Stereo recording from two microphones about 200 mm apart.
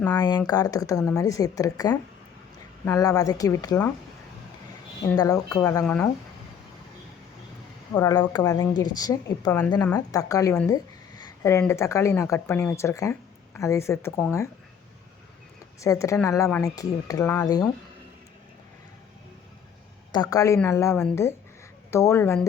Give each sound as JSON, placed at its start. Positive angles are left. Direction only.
{"t": 0.1, "sound": "a woman's voice", "side_deg": 20}
{"t": 5.0, "sound": "a woman's voice", "side_deg": 20}
{"t": 5.8, "sound": "a woman's voice", "side_deg": 5}
{"t": 7.9, "sound": "a woman's voice", "side_deg": 15}
{"t": 15.8, "sound": "a woman's voice", "side_deg": 15}
{"t": 20.3, "sound": "a woman's voice", "side_deg": 15}